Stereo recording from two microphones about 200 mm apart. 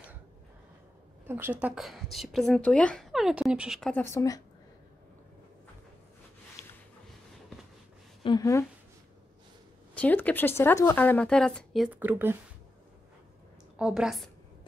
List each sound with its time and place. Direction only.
1.2 s speech: 10° right (ahead or behind); by 4.4 s 15° left (ahead or behind)
8.2 s speech: 20° left (ahead or behind)
9.9 s speech: 5° left (ahead or behind); by 12.4 s 10° right (ahead or behind)
13.7 s speech: 5° right (ahead or behind)